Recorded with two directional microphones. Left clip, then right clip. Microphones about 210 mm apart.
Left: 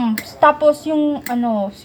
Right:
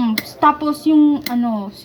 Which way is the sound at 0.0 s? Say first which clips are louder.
Left 1 dB; 60° left (ahead or behind).